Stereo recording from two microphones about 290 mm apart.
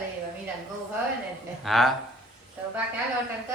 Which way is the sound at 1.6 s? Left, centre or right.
Centre.